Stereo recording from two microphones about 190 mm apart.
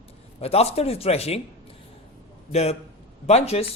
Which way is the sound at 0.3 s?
30° left (ahead or behind).